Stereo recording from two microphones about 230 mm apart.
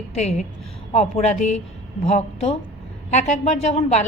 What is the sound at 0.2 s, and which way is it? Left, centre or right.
A woman's voice, left.